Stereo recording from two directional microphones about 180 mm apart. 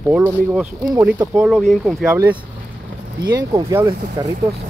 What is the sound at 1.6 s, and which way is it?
Speech, centre (ahead or behind).